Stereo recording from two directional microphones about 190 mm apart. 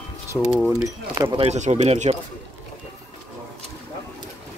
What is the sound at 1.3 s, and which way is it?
Speech, 35° right (ahead or behind).